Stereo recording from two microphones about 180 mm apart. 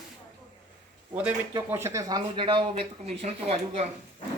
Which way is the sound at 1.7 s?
15° right (ahead or behind).